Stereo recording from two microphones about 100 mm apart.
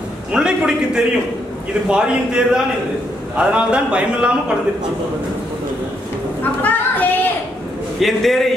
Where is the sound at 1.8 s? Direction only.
10° right (ahead or behind).